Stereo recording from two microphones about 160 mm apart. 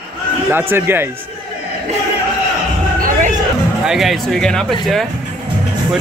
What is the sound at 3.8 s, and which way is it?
Speech, centre (ahead or behind).